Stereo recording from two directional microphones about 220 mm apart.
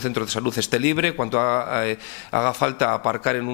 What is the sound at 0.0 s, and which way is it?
A man's voice, 20° left (ahead or behind).